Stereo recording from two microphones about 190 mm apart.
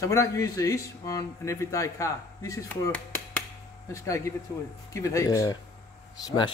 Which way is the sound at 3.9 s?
15° left (ahead or behind).